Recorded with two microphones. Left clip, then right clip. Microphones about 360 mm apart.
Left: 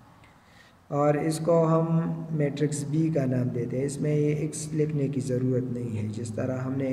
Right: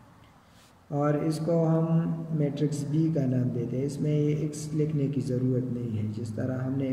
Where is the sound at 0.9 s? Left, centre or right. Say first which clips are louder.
Left 3 dB; centre.